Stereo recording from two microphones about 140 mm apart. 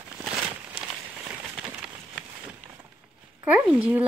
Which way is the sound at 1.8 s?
5° right (ahead or behind).